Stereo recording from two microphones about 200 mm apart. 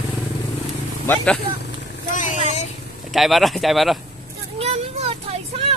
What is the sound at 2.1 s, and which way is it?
Speech, 40° left (ahead or behind).